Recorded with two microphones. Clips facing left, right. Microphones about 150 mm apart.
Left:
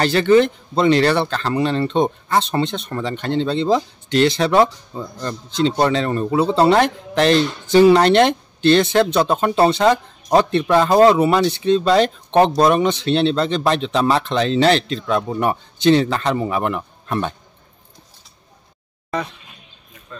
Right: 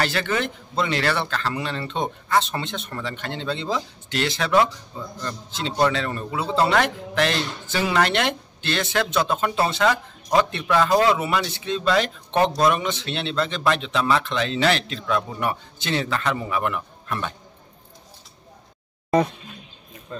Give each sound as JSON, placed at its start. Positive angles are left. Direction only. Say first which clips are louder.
{"t": 0.0, "sound": "speech", "louder": "left 11 dB", "side_deg": 30}
{"t": 20.1, "sound": "speech", "louder": "right 3 dB", "side_deg": -30}